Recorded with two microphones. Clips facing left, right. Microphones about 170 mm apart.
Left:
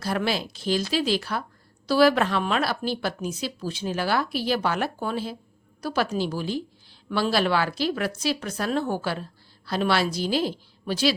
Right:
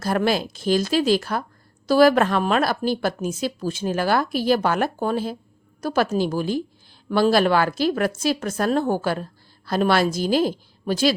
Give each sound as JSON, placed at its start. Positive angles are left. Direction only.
{"t": 0.0, "sound": "a woman's voice", "side_deg": -45}